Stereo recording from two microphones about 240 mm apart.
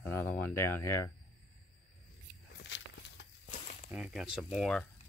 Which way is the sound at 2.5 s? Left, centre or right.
Left.